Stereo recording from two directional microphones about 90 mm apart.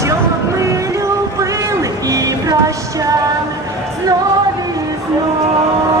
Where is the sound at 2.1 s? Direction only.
40° right (ahead or behind).